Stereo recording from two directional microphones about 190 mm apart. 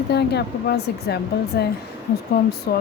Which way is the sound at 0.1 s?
60° left (ahead or behind).